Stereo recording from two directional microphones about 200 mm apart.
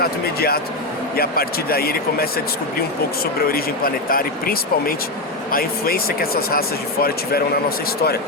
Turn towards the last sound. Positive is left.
turn(degrees=50)  # may be behind; listen again after turning